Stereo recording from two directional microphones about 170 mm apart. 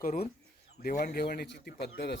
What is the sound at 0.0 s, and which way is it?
Speech, 55° left (ahead or behind).